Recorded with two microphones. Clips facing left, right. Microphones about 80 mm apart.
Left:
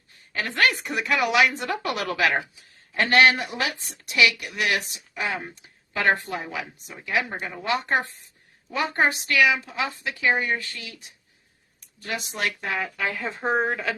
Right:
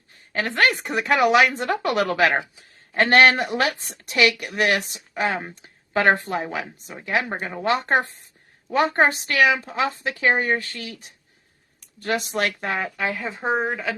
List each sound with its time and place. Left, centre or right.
0.1 s speech: right
11.8 s speech: right
12.8 s speech: right
13.1 s a woman's voice: centre